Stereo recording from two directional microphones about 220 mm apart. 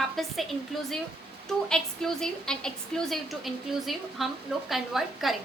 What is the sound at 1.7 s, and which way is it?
A woman's voice, centre (ahead or behind).